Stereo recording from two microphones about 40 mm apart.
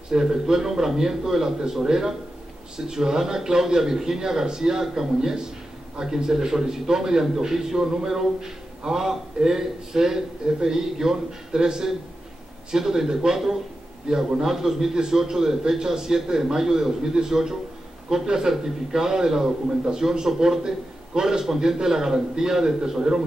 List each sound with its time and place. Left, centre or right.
0.1 s a man's voice: centre